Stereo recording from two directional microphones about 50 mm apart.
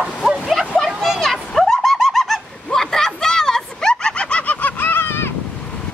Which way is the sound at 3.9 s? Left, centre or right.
Left.